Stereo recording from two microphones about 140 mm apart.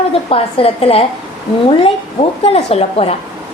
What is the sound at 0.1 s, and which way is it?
Speech, 45° left (ahead or behind).